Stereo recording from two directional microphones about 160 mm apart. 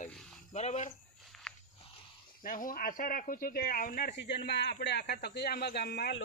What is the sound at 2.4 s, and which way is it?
Speech, 60° left (ahead or behind).